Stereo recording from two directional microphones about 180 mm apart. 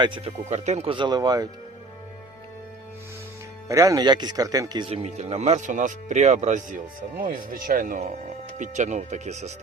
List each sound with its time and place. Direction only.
0.0 s speech: 25° right (ahead or behind)
0.4 s speech: 40° right (ahead or behind); by 1.5 s 20° right (ahead or behind)
3.7 s speech: 20° right (ahead or behind); by 9.5 s 40° right (ahead or behind)